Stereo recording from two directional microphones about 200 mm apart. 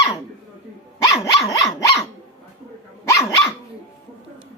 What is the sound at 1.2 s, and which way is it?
Dog, 15° left (ahead or behind).